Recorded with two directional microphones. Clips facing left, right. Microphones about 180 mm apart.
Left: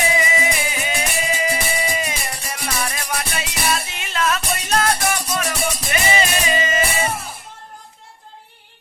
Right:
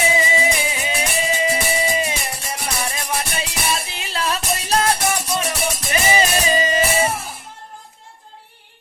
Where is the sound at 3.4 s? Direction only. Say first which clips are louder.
Left 1 dB; 30° right (ahead or behind).